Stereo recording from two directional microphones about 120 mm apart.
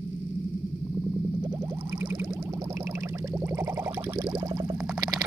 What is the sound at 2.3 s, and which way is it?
Music, 30° right (ahead or behind).